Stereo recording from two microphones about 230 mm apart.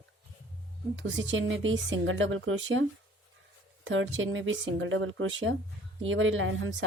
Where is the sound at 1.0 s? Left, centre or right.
Right.